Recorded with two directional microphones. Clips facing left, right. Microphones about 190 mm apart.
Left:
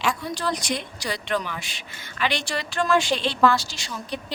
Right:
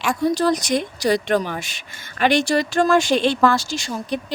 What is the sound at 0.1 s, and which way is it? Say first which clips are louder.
Speech: right 9 dB; 40° right (ahead or behind).